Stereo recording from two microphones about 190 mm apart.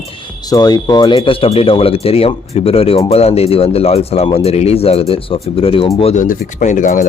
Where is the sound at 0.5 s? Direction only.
20° left (ahead or behind).